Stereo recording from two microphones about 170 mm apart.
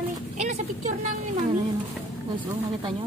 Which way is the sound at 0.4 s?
45° right (ahead or behind).